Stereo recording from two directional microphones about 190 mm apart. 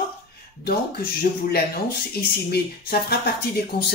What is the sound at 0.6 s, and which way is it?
Speech, 55° left (ahead or behind).